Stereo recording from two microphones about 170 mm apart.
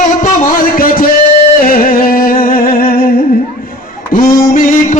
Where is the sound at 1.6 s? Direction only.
60° left (ahead or behind).